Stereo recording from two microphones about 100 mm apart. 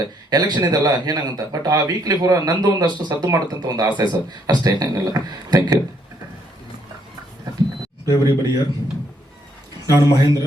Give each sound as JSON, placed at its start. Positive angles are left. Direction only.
{"t": 0.0, "sound": "a sound", "side_deg": -40}
{"t": 0.5, "sound": "a man's voice", "side_deg": -45}
{"t": 8.1, "sound": "a man's voice", "side_deg": -45}
{"t": 9.8, "sound": "speech", "side_deg": -40}